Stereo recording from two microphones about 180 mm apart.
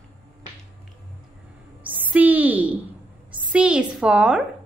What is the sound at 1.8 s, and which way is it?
A woman's voice, 10° right (ahead or behind).